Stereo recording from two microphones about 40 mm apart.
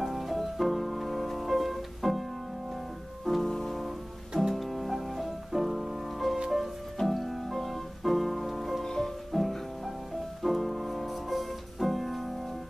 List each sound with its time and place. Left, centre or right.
0.0 s music: centre
3.3 s music: centre
8.8 s music: centre
9.3 s music: centre